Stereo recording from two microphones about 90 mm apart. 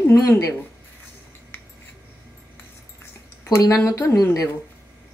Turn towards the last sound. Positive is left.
turn(degrees=35)  # may be behind; listen again after turning